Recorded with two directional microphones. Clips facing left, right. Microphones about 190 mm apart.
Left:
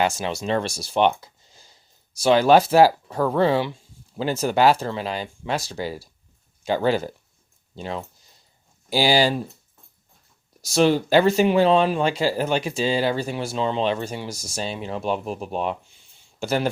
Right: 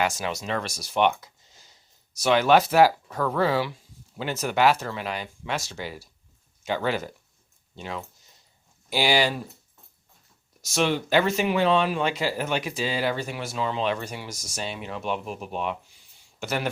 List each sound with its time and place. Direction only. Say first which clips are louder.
0.0 s speech: left 4 dB; 30° left (ahead or behind)
10.6 s speech: left 6 dB; 35° left (ahead or behind)